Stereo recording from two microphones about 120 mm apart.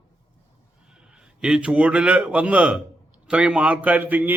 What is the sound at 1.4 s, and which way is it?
A man's voice, 10° right (ahead or behind).